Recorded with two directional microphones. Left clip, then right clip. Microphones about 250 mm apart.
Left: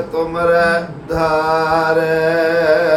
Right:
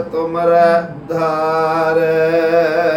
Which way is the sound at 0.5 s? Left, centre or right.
Centre.